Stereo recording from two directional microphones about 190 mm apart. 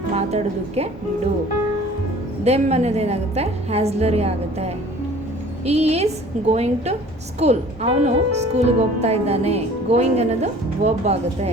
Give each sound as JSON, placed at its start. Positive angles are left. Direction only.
{"t": 0.1, "sound": "a woman's voice", "side_deg": -35}
{"t": 2.4, "sound": "a woman's voice", "side_deg": -35}